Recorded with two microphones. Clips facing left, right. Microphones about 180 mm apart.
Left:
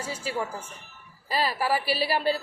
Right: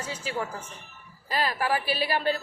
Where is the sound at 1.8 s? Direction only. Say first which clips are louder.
Left 1 dB; 35° left (ahead or behind).